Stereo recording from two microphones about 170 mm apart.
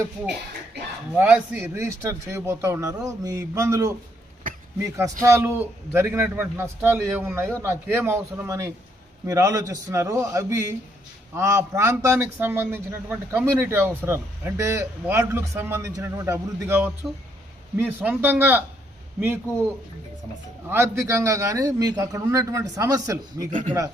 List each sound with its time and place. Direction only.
0.7 s a sound: 85° right
1.1 s a man's voice: 10° right (ahead or behind)
5.2 s a man's voice: 15° right (ahead or behind)
20.7 s a man's voice: 15° right (ahead or behind)